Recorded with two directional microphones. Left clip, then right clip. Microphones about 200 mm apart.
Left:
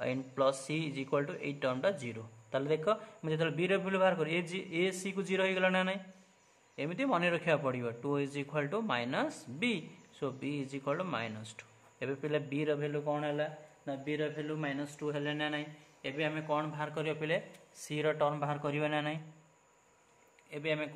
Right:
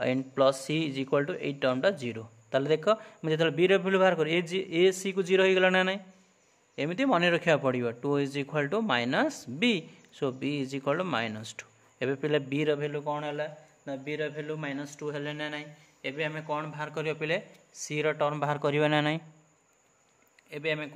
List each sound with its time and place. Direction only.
0.0 s a man's voice: 40° right (ahead or behind)
18.4 s a man's voice: 55° right (ahead or behind)
20.4 s a man's voice: 40° right (ahead or behind)